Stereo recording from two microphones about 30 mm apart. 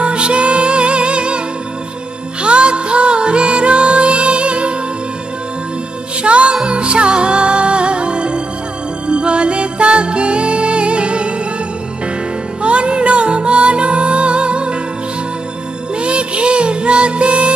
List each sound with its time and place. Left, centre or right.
0.0 s music: right
2.4 s music: right
6.2 s music: right
12.6 s music: right
16.0 s music: right